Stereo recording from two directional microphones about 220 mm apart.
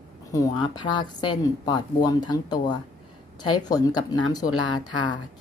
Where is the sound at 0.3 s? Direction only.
20° left (ahead or behind).